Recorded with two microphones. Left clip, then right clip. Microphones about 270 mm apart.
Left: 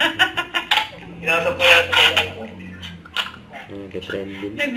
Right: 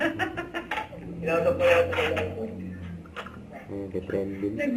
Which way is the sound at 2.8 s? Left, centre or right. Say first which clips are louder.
Left 13 dB; centre.